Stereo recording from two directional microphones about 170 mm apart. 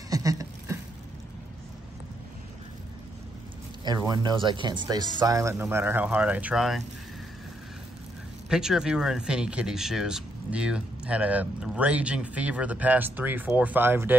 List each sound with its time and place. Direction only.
0.1 s a sound: 20° right (ahead or behind)
3.8 s speech: 25° right (ahead or behind); by 6.8 s centre (ahead or behind)
8.5 s speech: 5° right (ahead or behind)